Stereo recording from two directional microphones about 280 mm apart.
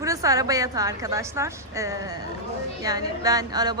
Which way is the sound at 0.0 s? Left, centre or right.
Centre.